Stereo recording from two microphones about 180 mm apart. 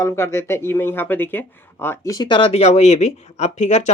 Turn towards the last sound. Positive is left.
turn(degrees=40)  # may be behind; listen again after turning